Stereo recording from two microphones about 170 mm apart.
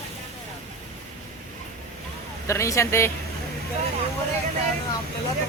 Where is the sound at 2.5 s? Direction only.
15° left (ahead or behind).